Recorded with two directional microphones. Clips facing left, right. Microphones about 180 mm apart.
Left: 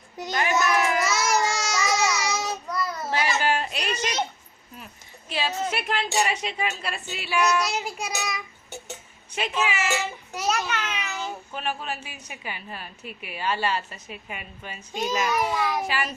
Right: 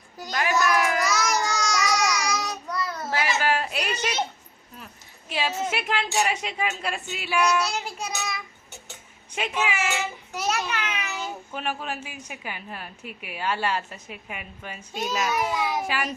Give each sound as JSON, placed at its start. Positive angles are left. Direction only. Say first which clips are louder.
{"t": 0.2, "sound": "a child's voice", "louder": "left 1 dB", "side_deg": 0}
{"t": 0.6, "sound": "a sound", "louder": "even", "side_deg": 0}
{"t": 1.1, "sound": "babbling", "louder": "left 1 dB", "side_deg": 25}
{"t": 2.0, "sound": "child singing", "louder": "left 1 dB", "side_deg": 5}
{"t": 2.2, "sound": "child singing", "louder": "left 1 dB", "side_deg": 25}
{"t": 2.6, "sound": "child singing", "louder": "left 1 dB", "side_deg": 5}
{"t": 3.1, "sound": "a sound", "louder": "even", "side_deg": -5}
{"t": 5.3, "sound": "a woman's voice", "louder": "even", "side_deg": -10}
{"t": 7.7, "sound": "child singing", "louder": "left 1 dB", "side_deg": 5}
{"t": 9.3, "sound": "a woman's voice", "louder": "even", "side_deg": -15}
{"t": 10.5, "sound": "a child's voice", "louder": "left 2 dB", "side_deg": 0}